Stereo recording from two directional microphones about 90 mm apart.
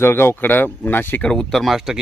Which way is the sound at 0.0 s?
25° left (ahead or behind).